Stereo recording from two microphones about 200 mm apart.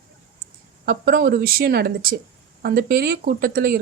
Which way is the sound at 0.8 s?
50° right (ahead or behind).